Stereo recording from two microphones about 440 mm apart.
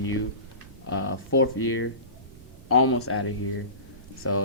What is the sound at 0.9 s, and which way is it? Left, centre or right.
Speech, left.